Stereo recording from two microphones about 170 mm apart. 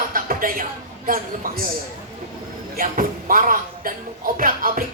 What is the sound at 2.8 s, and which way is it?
Speech, 55° right (ahead or behind).